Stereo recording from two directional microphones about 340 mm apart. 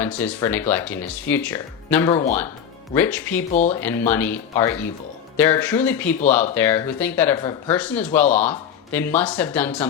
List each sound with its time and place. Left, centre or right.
0.0 s speech: centre